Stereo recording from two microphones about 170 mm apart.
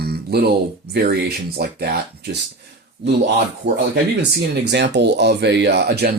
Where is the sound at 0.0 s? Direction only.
70° right (ahead or behind).